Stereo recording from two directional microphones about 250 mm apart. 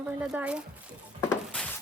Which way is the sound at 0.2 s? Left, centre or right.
Centre.